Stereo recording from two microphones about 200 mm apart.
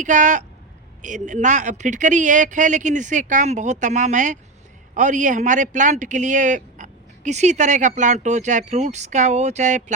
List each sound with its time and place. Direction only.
0.0 s a man's voice: 40° right (ahead or behind)